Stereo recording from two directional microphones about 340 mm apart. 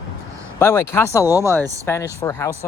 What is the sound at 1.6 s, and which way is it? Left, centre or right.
Speech, centre.